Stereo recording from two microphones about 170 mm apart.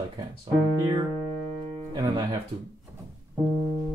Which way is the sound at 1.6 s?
35° right (ahead or behind).